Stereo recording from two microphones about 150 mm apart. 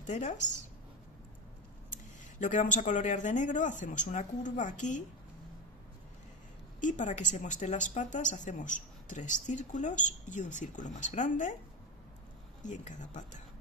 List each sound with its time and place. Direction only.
0.0 s a woman's voice: 50° left (ahead or behind)
1.9 s speech: 55° left (ahead or behind)
6.8 s speech: 55° left (ahead or behind)
12.6 s speech: 55° left (ahead or behind)